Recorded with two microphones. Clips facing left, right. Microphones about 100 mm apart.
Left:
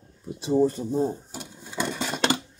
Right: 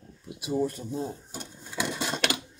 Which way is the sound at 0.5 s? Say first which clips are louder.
Left 7 dB; 20° left (ahead or behind).